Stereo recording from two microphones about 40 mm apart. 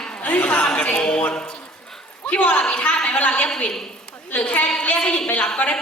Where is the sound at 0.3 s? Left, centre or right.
Left.